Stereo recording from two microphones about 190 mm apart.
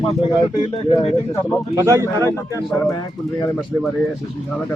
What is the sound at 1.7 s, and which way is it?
Speech, 15° right (ahead or behind).